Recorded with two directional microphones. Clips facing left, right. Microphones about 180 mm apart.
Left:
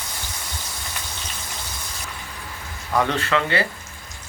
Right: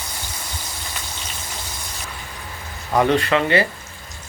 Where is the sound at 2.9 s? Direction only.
20° right (ahead or behind).